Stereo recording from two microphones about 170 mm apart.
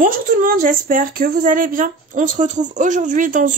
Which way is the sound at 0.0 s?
55° right (ahead or behind).